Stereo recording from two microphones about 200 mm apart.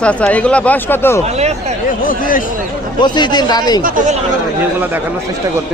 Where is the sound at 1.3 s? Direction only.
35° right (ahead or behind).